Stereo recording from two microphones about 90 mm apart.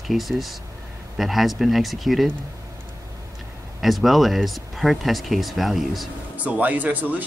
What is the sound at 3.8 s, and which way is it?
Speech, centre (ahead or behind).